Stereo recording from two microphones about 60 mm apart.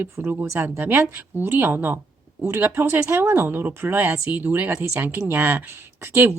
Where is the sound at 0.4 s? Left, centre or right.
Right.